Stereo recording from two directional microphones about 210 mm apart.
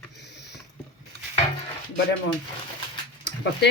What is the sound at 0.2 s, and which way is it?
Mechanisms, 55° left (ahead or behind).